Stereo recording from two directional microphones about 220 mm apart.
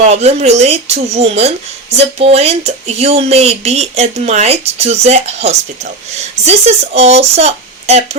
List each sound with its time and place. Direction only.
0.0 s speech: 30° right (ahead or behind)